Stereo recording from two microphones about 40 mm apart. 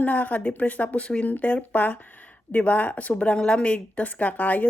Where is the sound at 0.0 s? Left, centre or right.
Left.